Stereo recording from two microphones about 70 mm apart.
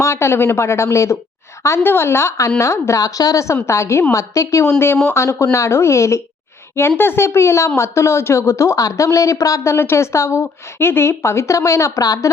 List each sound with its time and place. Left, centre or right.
0.0 s a woman's voice: left
3.0 s a woman's voice: left
9.7 s a woman's voice: left